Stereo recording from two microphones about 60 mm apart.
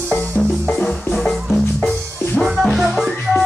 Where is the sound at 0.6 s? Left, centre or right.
Centre.